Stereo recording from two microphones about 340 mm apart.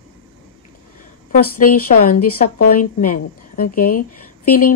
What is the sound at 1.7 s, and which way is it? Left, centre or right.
A woman's voice, left.